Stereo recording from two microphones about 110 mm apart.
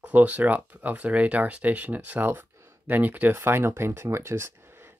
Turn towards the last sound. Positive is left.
turn(degrees=-20)  # may be behind; listen again after turning